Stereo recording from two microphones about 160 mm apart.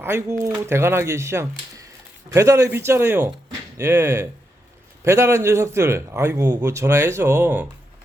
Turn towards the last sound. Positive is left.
turn(degrees=-10)  # may be behind; listen again after turning